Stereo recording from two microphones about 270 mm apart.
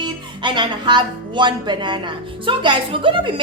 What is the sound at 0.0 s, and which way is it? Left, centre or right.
Speech, centre.